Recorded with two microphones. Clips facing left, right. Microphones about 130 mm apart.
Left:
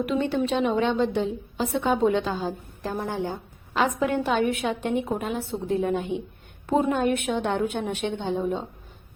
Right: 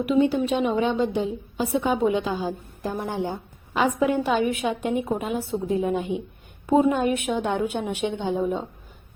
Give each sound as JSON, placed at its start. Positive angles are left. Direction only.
{"t": 0.0, "sound": "a woman's voice", "side_deg": -10}